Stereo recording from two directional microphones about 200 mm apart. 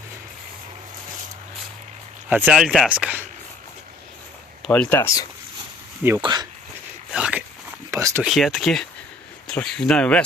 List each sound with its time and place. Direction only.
2.3 s speech: 5° right (ahead or behind)
4.6 s speech: 5° left (ahead or behind)
6.0 s speech: 10° right (ahead or behind)
6.2 s speech: 20° right (ahead or behind)
7.1 s a sound: 5° right (ahead or behind)
8.2 s speech: centre (ahead or behind)